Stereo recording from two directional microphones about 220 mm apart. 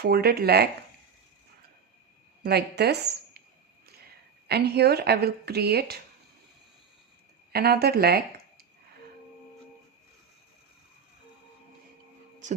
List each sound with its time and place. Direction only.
0.0 s speech: 45° right (ahead or behind)
2.4 s speech: 45° right (ahead or behind)
4.4 s speech: 50° right (ahead or behind)
7.5 s speech: 45° right (ahead or behind)